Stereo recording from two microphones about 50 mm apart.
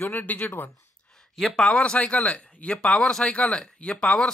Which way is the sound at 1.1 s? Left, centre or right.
Centre.